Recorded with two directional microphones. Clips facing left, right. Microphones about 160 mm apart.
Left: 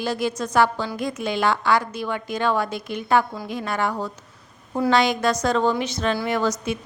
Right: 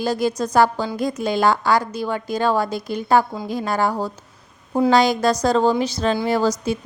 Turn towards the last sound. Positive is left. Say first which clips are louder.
# right 4 dB
turn(degrees=-35)  # may be behind; listen again after turning